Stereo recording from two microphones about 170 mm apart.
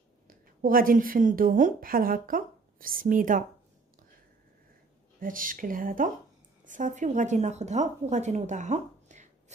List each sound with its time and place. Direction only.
0.3 s a woman's voice: 55° right (ahead or behind)
5.2 s a woman's voice: 55° right (ahead or behind)